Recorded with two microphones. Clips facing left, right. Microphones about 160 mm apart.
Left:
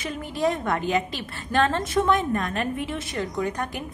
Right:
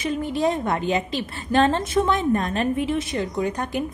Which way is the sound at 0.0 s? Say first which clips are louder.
Right 3 dB; 20° right (ahead or behind).